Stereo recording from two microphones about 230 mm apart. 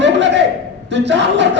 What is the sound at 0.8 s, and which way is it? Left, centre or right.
Speech, right.